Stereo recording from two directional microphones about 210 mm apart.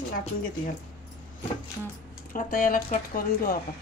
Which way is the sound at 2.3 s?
40° left (ahead or behind).